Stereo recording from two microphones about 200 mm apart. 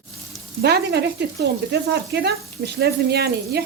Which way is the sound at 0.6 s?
55° right (ahead or behind).